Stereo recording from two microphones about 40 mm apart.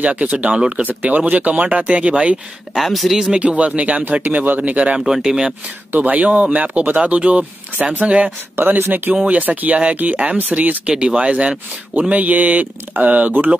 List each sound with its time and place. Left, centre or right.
0.0 s speech: right
2.7 s speech: centre
3.3 s speech: right
4.2 s speech: right
4.6 s speech: right
5.0 s speech: centre
5.9 s speech: right
8.5 s speech: right
9.1 s speech: right
10.9 s speech: right
12.1 s speech: right